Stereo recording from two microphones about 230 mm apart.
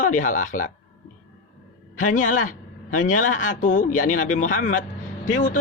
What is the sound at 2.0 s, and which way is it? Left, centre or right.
A man's voice, left.